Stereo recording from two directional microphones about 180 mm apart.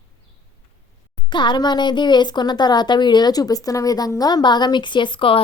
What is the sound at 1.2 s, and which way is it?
Speech, 25° left (ahead or behind).